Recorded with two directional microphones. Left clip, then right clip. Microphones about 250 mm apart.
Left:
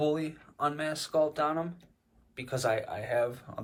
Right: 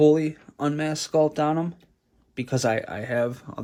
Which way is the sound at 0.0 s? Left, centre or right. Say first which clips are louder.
Right 11 dB; right.